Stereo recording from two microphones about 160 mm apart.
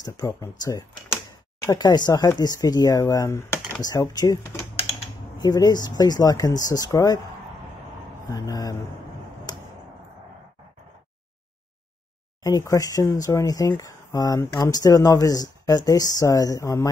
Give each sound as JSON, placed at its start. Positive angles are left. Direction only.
{"t": 0.0, "sound": "speech", "side_deg": 25}
{"t": 8.3, "sound": "speech", "side_deg": 20}
{"t": 9.5, "sound": "a sound", "side_deg": 25}
{"t": 12.4, "sound": "speech", "side_deg": 20}